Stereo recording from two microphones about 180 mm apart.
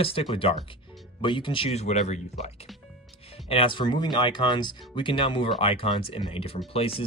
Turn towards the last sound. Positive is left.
turn(degrees=30)  # may be behind; listen again after turning